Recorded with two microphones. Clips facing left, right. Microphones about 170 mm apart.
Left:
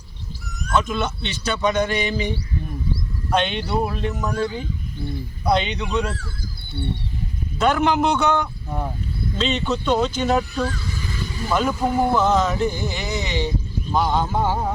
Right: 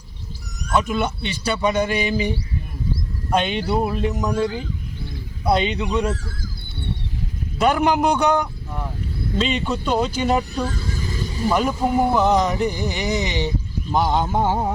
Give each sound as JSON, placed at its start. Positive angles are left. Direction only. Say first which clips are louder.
{"t": 0.7, "sound": "speech", "louder": "right 1 dB", "side_deg": -10}
{"t": 3.3, "sound": "speech", "louder": "right 1 dB", "side_deg": -10}
{"t": 4.2, "sound": "speech", "louder": "right 1 dB", "side_deg": -15}
{"t": 5.5, "sound": "speech", "louder": "right 1 dB", "side_deg": -5}
{"t": 7.6, "sound": "speech", "louder": "right 1 dB", "side_deg": -10}
{"t": 10.8, "sound": "vehicle", "louder": "right 2 dB", "side_deg": -40}
{"t": 11.4, "sound": "speech", "louder": "right 1 dB", "side_deg": -15}
{"t": 13.9, "sound": "a sound", "louder": "right 1 dB", "side_deg": -20}